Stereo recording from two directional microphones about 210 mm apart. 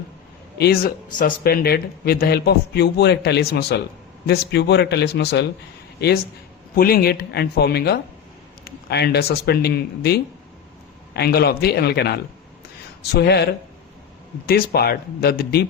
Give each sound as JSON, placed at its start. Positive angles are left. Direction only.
{"t": 0.6, "sound": "speech", "side_deg": 45}
{"t": 6.7, "sound": "speech", "side_deg": 45}